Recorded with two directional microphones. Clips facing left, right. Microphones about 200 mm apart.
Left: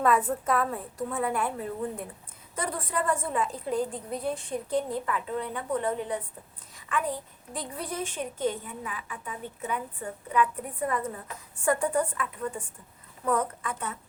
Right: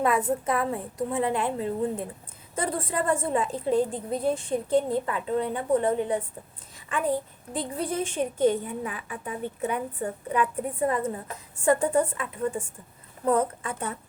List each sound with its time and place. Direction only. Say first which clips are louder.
0.3 s a woman's voice: right 2 dB; 15° right (ahead or behind); by 8.2 s 30° right (ahead or behind)
8.4 s a woman's voice: right 7 dB; 50° right (ahead or behind)
10.5 s a woman's voice: right 5 dB; 25° right (ahead or behind)